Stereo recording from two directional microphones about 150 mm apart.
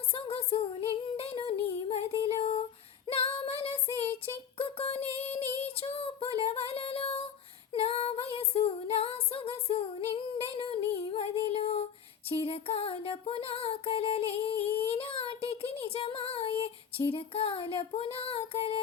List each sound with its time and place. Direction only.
0.1 s child singing: 40° left (ahead or behind)
3.1 s female singing: 40° left (ahead or behind)
4.5 s a sound: 40° left (ahead or behind)
5.5 s child singing: 40° left (ahead or behind)
7.7 s female singing: 40° left (ahead or behind)
10.6 s a sound: 35° left (ahead or behind)
12.3 s music: 40° left (ahead or behind)